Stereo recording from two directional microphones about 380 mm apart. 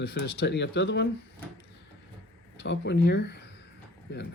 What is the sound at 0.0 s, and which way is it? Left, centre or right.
Speech, left.